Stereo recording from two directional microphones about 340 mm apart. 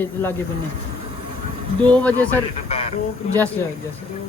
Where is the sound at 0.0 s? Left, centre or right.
Centre.